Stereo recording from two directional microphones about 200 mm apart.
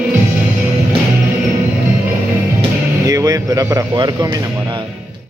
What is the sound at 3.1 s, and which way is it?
Speech, 15° right (ahead or behind).